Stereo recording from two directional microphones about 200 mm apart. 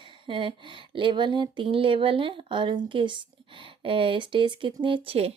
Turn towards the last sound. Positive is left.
turn(degrees=-30)  # may be behind; listen again after turning